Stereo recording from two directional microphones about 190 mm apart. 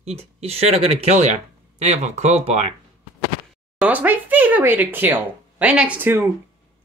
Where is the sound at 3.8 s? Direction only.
10° right (ahead or behind).